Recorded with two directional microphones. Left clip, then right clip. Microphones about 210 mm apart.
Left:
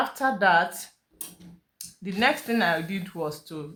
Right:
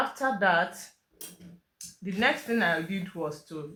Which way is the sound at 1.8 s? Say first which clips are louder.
Left 2 dB; 35° left (ahead or behind).